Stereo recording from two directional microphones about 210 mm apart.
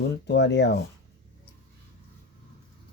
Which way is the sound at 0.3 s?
55° left (ahead or behind).